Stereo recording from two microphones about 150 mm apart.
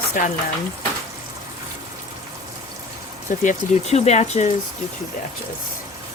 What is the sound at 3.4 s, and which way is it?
Speech, 45° left (ahead or behind).